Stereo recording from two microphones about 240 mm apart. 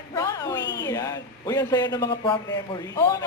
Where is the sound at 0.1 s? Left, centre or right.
Centre.